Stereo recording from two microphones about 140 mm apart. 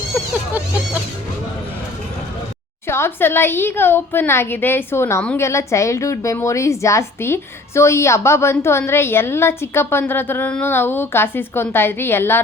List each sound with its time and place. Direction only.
2.8 s a woman's voice: 15° left (ahead or behind)